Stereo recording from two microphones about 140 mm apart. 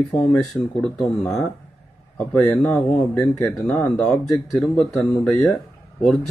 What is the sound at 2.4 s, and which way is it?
Speech, 5° left (ahead or behind).